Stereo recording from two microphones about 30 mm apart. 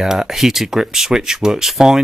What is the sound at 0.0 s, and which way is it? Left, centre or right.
Speech, centre.